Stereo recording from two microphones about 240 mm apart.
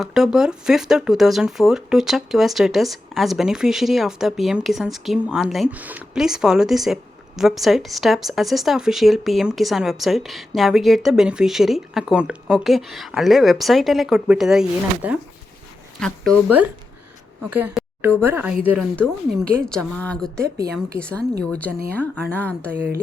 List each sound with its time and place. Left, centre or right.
0.0 s speech: centre
17.5 s a woman's voice: centre